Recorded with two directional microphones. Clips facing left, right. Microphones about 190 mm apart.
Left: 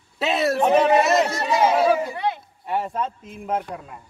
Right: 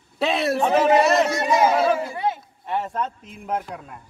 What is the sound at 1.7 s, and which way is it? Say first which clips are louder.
Chatter: left 1 dB; 5° left (ahead or behind).